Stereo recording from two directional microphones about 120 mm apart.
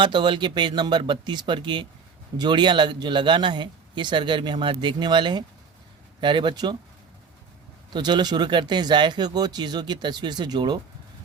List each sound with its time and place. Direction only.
0.0 s speech: 40° right (ahead or behind)
7.9 s speech: 35° right (ahead or behind)